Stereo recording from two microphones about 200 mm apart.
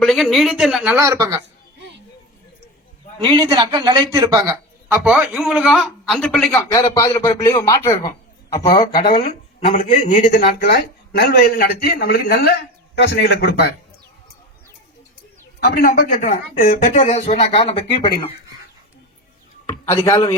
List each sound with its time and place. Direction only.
0.0 s speech: centre (ahead or behind)
0.9 s a man's voice: 15° right (ahead or behind)
3.2 s a man's voice: 25° right (ahead or behind); by 6.7 s 5° left (ahead or behind)
6.7 s a man's voice: 15° left (ahead or behind); by 10.4 s 40° left (ahead or behind)
11.2 s a man's voice: 50° left (ahead or behind)
15.6 s speech: 45° left (ahead or behind); by 18.3 s 25° left (ahead or behind)
19.6 s speech: 15° left (ahead or behind)